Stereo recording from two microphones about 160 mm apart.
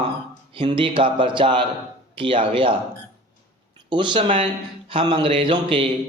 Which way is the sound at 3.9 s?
30° right (ahead or behind).